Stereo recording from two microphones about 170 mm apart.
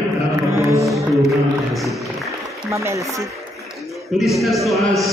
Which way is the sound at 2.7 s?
15° right (ahead or behind).